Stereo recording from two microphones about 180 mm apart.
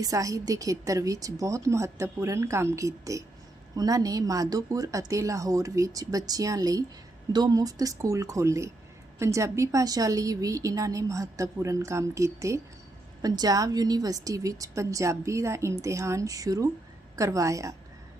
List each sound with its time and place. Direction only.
0.0 s a woman's voice: 20° right (ahead or behind)